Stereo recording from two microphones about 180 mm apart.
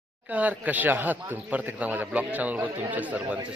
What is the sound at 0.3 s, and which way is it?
Speech, 10° right (ahead or behind).